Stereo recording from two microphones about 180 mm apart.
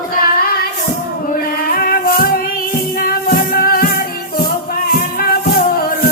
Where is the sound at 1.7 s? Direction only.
50° left (ahead or behind).